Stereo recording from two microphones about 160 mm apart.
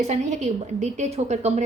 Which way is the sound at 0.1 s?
45° right (ahead or behind).